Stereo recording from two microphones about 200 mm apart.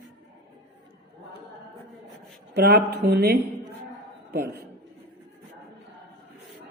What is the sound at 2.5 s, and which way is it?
Speech, 50° right (ahead or behind).